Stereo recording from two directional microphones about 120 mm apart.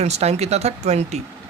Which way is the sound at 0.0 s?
65° right (ahead or behind).